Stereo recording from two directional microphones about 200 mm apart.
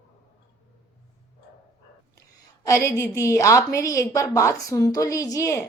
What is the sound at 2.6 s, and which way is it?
A woman's voice, 15° left (ahead or behind).